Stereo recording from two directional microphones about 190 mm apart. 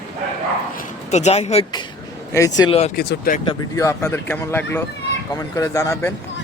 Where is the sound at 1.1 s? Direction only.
35° left (ahead or behind).